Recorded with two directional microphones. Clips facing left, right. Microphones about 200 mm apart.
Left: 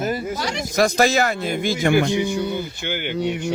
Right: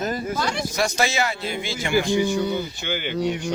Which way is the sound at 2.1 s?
20° left (ahead or behind).